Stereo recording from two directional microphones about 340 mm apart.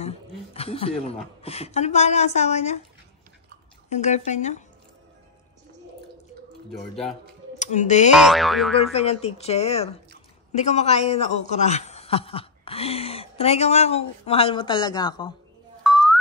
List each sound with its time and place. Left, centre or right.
0.0 s a woman's voice: centre
3.9 s a woman's voice: centre
7.5 s speech: left
8.2 s boing: centre
8.9 s a man's voice: centre
15.8 s a sound: centre